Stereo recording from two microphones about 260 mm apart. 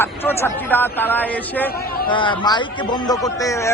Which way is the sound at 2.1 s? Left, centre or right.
Centre.